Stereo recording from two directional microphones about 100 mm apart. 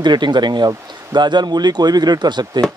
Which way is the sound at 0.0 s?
50° right (ahead or behind).